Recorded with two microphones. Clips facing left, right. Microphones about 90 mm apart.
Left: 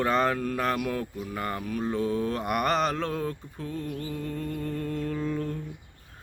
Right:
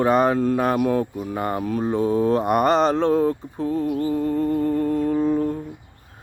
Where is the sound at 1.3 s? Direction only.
25° right (ahead or behind).